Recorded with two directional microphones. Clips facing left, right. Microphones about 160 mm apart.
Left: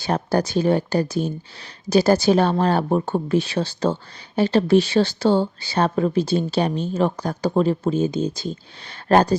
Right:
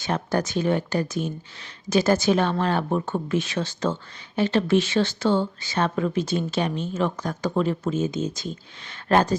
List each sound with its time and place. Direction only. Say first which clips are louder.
0.0 s speech: left 4 dB; 35° left (ahead or behind)